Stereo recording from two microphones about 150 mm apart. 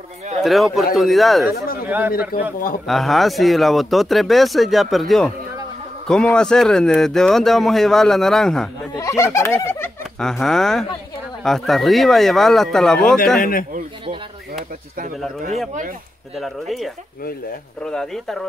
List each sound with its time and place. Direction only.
0.4 s speech: centre (ahead or behind)
1.9 s speech: 10° right (ahead or behind)
2.9 s speech: centre (ahead or behind)
8.9 s speech: 20° left (ahead or behind)
10.2 s speech: centre (ahead or behind)
13.4 s a man's voice: 70° left (ahead or behind)
16.3 s speech: centre (ahead or behind)